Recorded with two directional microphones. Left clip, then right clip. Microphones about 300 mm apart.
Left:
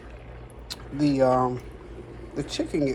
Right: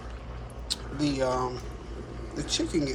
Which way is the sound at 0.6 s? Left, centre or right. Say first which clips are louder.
Left 4 dB; centre.